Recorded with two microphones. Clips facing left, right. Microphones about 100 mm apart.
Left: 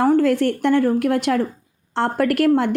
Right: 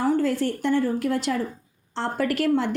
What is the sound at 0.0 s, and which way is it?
A woman's voice, 60° left (ahead or behind).